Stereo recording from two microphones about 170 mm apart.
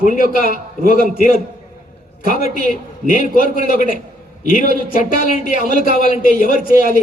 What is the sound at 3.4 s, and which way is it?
Speech, 55° left (ahead or behind).